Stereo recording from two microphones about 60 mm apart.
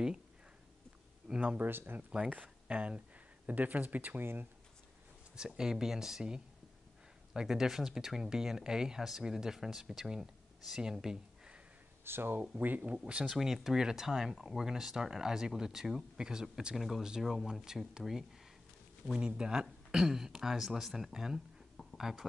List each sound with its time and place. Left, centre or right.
1.2 s speech: centre
1.6 s speech: right
2.0 s speech: right
4.2 s speech: right
5.3 s speech: centre
12.0 s speech: right
13.3 s speech: centre